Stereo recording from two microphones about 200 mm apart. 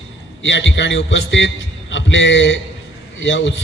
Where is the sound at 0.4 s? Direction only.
65° left (ahead or behind).